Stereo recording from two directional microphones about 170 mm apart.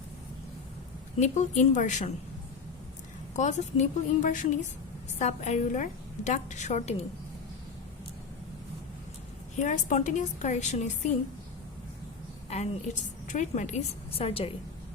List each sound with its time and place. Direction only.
1.2 s a woman's voice: 45° left (ahead or behind)
3.3 s a woman's voice: 45° left (ahead or behind)
9.6 s a woman's voice: 45° left (ahead or behind)
12.5 s a woman's voice: 45° left (ahead or behind)